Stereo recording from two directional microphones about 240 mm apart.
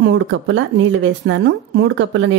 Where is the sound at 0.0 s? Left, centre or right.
Right.